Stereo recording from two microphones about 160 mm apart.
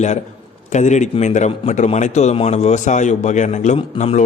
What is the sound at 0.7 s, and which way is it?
A man's voice, 50° left (ahead or behind).